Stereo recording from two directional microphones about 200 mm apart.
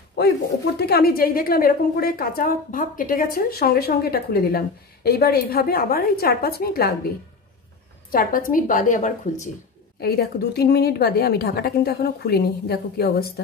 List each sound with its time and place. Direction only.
0.7 s a woman's voice: 50° left (ahead or behind)
8.1 s a woman's voice: 45° left (ahead or behind)
9.9 s a woman's voice: 50° left (ahead or behind)